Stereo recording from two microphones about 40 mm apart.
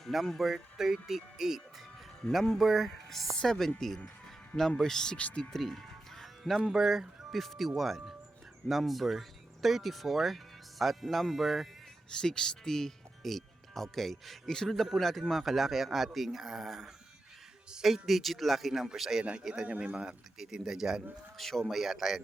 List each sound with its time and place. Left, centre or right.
0.0 s speech: centre
2.3 s speech: centre
5.1 s speech: left
5.5 s music: centre
6.7 s speech: centre
7.3 s speech: centre
12.2 s speech: centre
21.3 s speech: centre
21.7 s speech: centre